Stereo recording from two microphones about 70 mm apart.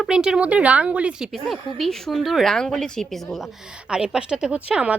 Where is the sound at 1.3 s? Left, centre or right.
Centre.